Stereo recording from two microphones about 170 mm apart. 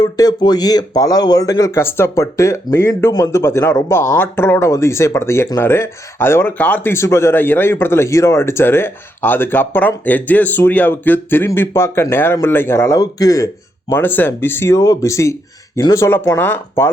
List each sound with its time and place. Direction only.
0.0 s speech: 25° left (ahead or behind)